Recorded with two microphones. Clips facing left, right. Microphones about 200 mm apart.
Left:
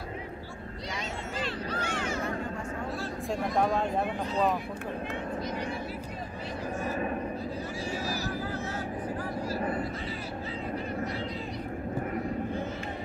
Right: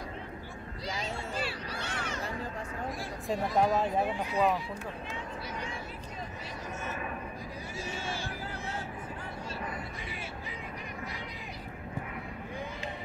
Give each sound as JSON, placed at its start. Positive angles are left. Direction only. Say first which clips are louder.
{"t": 1.8, "sound": "a sound", "louder": "left 5 dB", "side_deg": 10}
{"t": 3.3, "sound": "speech", "louder": "even", "side_deg": 0}
{"t": 7.9, "sound": "vehicle", "louder": "left 4 dB", "side_deg": -25}
{"t": 9.6, "sound": "vehicle", "louder": "left 9 dB", "side_deg": 35}